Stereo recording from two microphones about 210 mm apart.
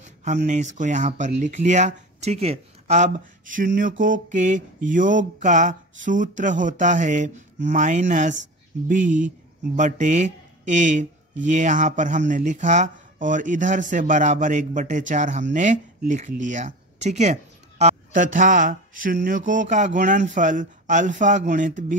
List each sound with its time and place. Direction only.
0.0 s speech: 35° right (ahead or behind)